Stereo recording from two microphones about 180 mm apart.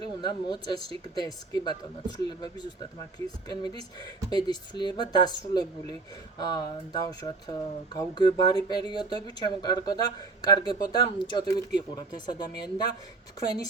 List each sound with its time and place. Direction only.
0.0 s speech: 25° left (ahead or behind)